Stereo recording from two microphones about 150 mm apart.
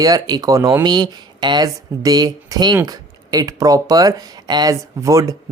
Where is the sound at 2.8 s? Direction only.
25° right (ahead or behind).